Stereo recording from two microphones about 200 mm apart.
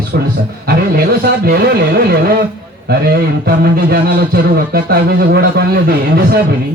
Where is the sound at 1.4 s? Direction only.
50° right (ahead or behind).